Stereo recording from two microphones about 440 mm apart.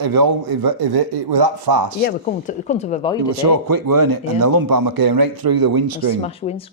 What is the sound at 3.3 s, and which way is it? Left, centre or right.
Speech, right.